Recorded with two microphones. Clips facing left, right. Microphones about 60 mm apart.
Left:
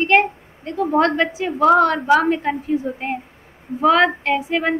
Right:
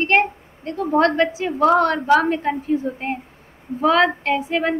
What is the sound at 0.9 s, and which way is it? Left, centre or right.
A woman's voice, left.